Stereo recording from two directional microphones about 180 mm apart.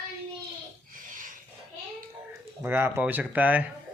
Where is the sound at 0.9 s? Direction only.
50° right (ahead or behind).